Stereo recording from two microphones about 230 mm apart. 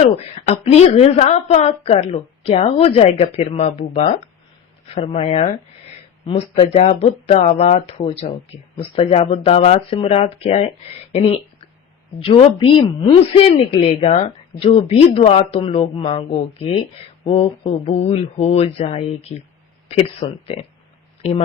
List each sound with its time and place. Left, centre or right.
0.0 s speech: left